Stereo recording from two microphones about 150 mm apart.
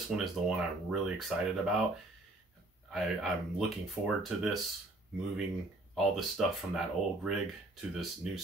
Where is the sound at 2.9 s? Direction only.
Centre (ahead or behind).